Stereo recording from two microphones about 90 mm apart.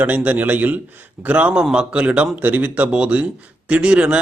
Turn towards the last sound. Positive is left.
turn(degrees=-15)  # may be behind; listen again after turning